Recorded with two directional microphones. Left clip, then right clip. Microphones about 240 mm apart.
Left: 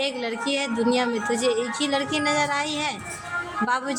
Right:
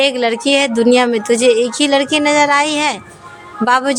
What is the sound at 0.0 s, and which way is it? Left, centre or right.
Speech, right.